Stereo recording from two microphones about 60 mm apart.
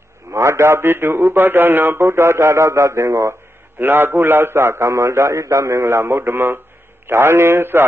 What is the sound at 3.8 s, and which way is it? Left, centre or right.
A man's voice, right.